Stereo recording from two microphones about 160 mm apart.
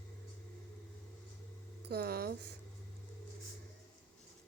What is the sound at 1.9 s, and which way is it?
Speech, 80° right.